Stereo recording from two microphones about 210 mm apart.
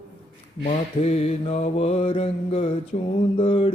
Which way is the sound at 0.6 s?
30° left (ahead or behind).